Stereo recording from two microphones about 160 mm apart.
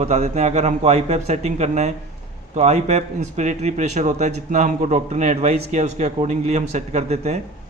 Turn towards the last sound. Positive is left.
turn(degrees=-45)  # may be behind; listen again after turning